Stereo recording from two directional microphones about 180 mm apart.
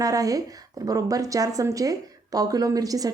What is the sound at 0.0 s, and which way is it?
A woman's voice, 20° right (ahead or behind).